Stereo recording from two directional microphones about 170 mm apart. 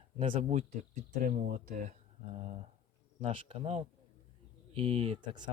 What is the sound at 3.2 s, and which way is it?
Speech, 35° right (ahead or behind).